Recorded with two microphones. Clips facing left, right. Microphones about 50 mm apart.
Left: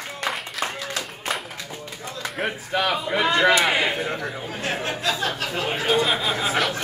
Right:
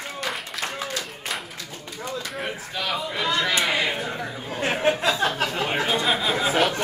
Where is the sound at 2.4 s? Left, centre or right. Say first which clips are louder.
Left 5 dB; left.